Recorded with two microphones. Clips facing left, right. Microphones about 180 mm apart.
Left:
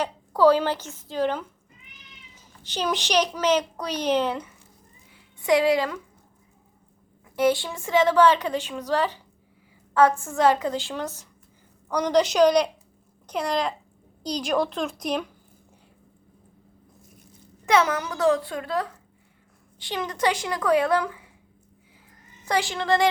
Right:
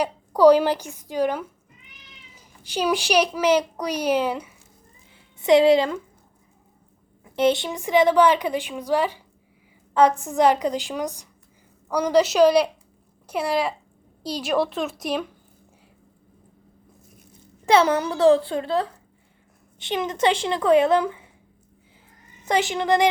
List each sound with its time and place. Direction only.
0.0 s a child's voice: 15° right (ahead or behind)
5.4 s a woman's voice: 25° right (ahead or behind)
7.3 s a child's voice: 20° right (ahead or behind); by 15.3 s 5° right (ahead or behind)
17.7 s a woman's voice: 30° right (ahead or behind)
22.4 s a woman's voice: 20° right (ahead or behind)